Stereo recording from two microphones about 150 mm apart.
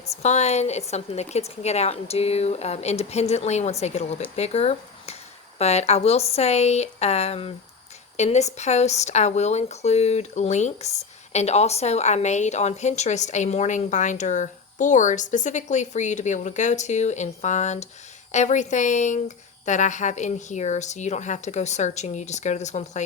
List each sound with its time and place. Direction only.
0.2 s speech: 50° left (ahead or behind)